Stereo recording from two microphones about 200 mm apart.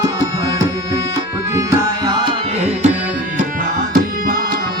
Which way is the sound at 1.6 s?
15° right (ahead or behind).